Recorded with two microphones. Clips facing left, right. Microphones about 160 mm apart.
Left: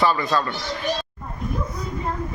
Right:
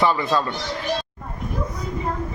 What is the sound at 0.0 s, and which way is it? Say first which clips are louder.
Speech: even; 20° right (ahead or behind).